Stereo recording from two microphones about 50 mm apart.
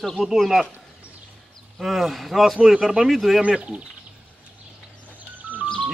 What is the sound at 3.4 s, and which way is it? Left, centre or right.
Speech, right.